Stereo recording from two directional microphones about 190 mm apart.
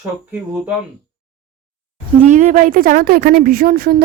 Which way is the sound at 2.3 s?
40° right (ahead or behind).